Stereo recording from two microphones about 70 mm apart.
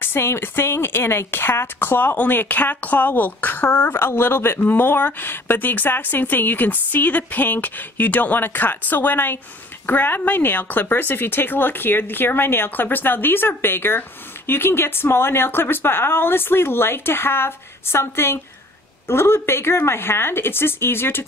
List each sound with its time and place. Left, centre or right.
0.0 s a woman's voice: left